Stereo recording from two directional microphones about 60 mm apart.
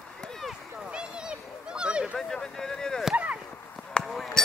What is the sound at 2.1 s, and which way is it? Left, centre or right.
Speech, centre.